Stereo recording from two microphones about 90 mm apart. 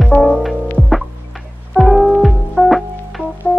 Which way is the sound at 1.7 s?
Centre (ahead or behind).